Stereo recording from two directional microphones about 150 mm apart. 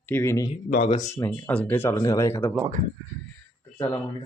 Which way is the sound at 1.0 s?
20° left (ahead or behind).